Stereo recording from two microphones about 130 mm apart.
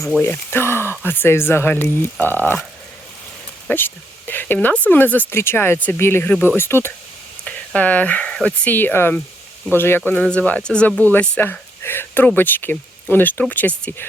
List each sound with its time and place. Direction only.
0.2 s speech: 15° left (ahead or behind)
3.7 s speech: 15° left (ahead or behind)